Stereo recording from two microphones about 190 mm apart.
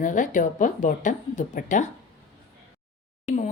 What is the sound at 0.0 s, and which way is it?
Speech, 45° left (ahead or behind).